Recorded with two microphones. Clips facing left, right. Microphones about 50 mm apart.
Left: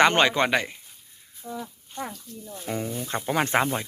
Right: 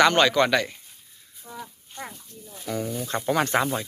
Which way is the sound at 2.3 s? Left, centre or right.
Centre.